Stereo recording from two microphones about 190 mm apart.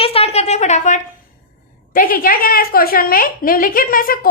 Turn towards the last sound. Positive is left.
turn(degrees=50)  # may be behind; listen again after turning